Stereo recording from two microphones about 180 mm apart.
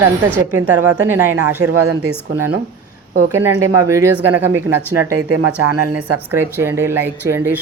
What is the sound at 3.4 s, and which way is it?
Speech, 15° right (ahead or behind).